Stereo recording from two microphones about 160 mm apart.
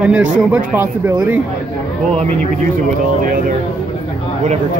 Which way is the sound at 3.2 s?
60° right (ahead or behind).